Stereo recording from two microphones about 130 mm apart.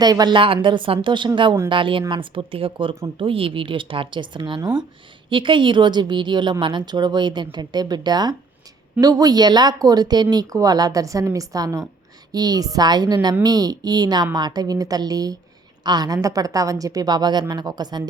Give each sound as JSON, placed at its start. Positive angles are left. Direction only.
{"t": 0.0, "sound": "a woman's voice", "side_deg": -30}